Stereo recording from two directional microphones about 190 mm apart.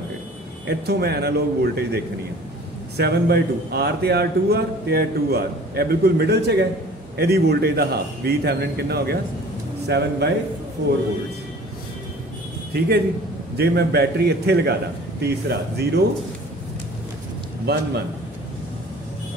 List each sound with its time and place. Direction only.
0.7 s a man's voice: 55° right (ahead or behind)
3.0 s a man's voice: 60° right (ahead or behind)
12.7 s a man's voice: 55° right (ahead or behind)
17.7 s a man's voice: 55° right (ahead or behind)